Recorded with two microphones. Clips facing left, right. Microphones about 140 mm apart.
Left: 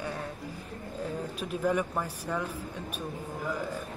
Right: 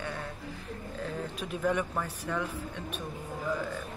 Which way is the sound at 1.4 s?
10° left (ahead or behind).